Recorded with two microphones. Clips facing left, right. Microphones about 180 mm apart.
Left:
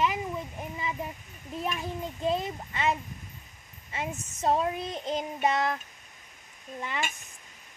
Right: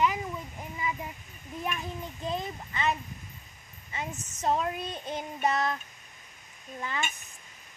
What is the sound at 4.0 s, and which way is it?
A woman's voice, 25° left (ahead or behind).